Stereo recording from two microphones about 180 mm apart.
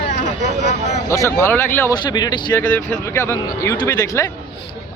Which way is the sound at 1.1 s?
15° left (ahead or behind).